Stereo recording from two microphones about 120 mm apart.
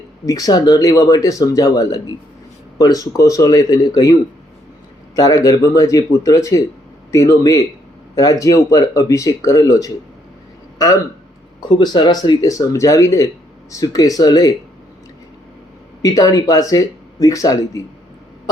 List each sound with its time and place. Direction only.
0.3 s speech: 30° left (ahead or behind)
5.1 s speech: 30° left (ahead or behind)
16.0 s speech: 30° left (ahead or behind)